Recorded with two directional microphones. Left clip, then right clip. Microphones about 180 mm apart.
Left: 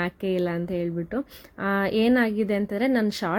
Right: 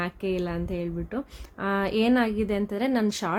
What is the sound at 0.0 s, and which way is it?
A woman's voice, 15° left (ahead or behind).